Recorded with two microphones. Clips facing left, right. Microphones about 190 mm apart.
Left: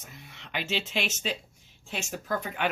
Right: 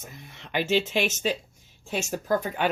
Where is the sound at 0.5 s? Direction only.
50° right (ahead or behind).